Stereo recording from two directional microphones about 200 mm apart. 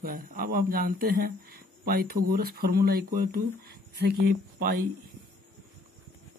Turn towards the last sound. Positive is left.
turn(degrees=-50)  # may be behind; listen again after turning